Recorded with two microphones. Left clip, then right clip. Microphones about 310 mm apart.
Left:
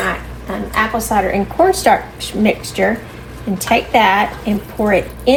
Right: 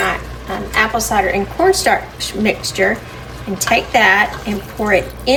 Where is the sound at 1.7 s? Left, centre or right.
Centre.